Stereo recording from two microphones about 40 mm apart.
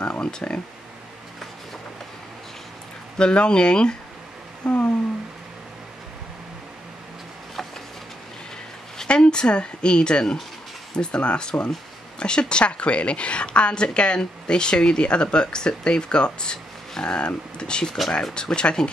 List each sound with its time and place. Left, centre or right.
0.0 s speech: left
3.2 s speech: left
4.6 s speech: left
8.9 s speech: left